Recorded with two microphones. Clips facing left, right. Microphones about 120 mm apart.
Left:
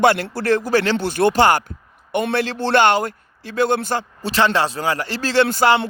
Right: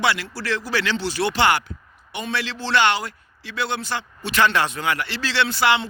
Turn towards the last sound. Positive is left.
turn(degrees=45)  # may be behind; listen again after turning